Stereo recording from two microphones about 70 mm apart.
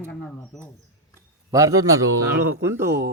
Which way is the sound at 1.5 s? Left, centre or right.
Right.